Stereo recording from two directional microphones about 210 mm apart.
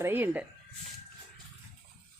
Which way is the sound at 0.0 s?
10° right (ahead or behind).